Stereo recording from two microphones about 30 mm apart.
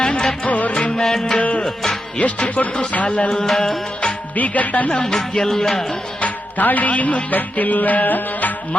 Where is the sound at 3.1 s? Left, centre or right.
Left.